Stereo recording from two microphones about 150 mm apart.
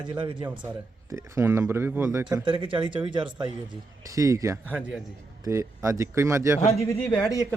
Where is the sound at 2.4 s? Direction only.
35° right (ahead or behind).